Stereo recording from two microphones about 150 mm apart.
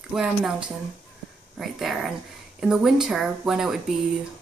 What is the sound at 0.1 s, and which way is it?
Speech, centre (ahead or behind).